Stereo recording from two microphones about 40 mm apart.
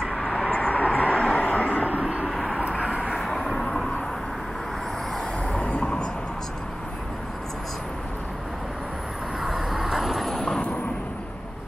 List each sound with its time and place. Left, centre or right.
0.2 s vehicle: left
0.5 s vehicle: left
2.2 s vehicle: centre
5.5 s vehicle: left
9.4 s vehicle: centre
10.3 s vehicle: centre